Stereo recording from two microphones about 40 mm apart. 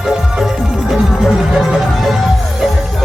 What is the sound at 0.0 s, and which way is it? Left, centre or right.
Music, centre.